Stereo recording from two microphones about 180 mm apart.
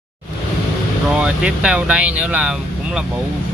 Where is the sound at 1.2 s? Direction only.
5° right (ahead or behind).